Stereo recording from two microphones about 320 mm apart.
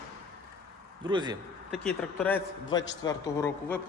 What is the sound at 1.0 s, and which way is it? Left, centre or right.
Speech, centre.